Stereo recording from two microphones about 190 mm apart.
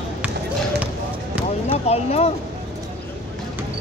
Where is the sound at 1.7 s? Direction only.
35° left (ahead or behind).